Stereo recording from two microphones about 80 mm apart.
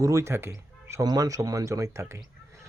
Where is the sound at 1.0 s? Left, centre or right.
Right.